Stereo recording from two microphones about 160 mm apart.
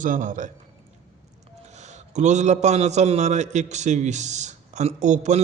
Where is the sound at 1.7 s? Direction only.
45° right (ahead or behind).